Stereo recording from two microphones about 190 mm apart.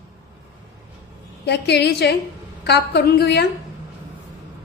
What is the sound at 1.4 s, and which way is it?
A woman's voice, 60° left (ahead or behind).